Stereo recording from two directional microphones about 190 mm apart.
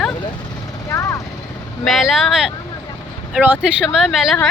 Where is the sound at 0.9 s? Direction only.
15° left (ahead or behind).